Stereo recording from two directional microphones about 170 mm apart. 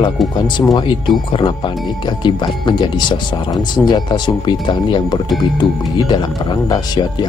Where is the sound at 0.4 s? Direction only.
25° left (ahead or behind).